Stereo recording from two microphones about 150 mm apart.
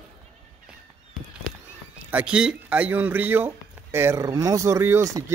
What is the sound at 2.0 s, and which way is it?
Speech, 10° right (ahead or behind).